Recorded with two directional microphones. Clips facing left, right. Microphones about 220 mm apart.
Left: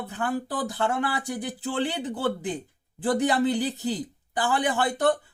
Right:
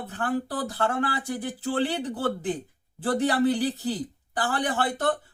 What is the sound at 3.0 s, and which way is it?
Speech, 15° left (ahead or behind).